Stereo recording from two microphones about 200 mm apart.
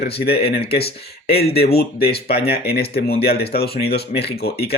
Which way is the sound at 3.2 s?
50° left (ahead or behind).